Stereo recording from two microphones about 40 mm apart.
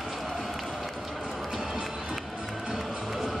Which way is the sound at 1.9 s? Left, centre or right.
Centre.